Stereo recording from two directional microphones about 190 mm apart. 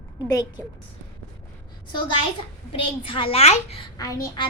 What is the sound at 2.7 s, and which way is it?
A child's voice, 30° left (ahead or behind).